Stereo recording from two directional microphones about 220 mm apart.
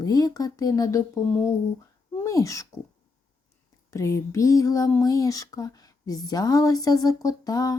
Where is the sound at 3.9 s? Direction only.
15° left (ahead or behind).